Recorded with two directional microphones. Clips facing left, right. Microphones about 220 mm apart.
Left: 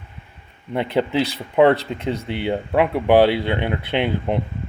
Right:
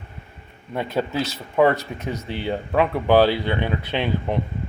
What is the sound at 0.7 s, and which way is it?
Speech, 25° left (ahead or behind).